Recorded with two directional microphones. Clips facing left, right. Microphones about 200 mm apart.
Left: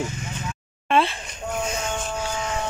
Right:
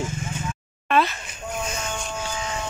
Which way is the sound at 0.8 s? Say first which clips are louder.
Left 1 dB; 25° left (ahead or behind).